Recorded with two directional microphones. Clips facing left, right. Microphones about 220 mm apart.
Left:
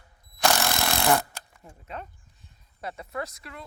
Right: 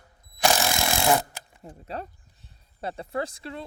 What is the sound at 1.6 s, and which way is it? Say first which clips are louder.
Speech: right 9 dB; 30° right (ahead or behind).